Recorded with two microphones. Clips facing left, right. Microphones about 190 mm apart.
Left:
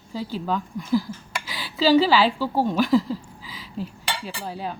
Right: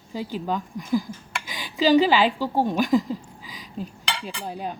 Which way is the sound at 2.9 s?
15° right (ahead or behind).